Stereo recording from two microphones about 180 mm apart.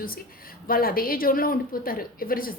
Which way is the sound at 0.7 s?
55° left (ahead or behind).